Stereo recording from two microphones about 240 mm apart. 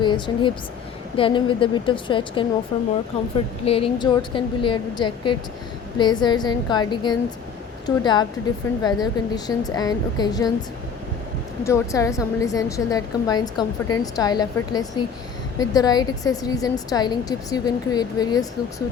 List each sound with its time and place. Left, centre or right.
0.0 s a woman's voice: centre
11.6 s a woman's voice: centre